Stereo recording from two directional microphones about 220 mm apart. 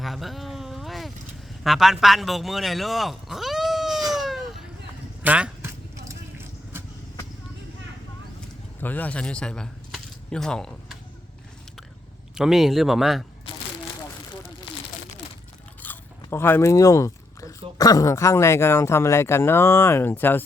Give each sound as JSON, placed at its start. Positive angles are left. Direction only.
{"t": 0.0, "sound": "a sound", "side_deg": 0}
{"t": 1.6, "sound": "speech", "side_deg": 0}
{"t": 4.1, "sound": "cat", "side_deg": 0}
{"t": 5.2, "sound": "vehicle", "side_deg": -5}
{"t": 8.8, "sound": "speech", "side_deg": 10}
{"t": 12.3, "sound": "speech", "side_deg": 0}
{"t": 15.8, "sound": "speech", "side_deg": 10}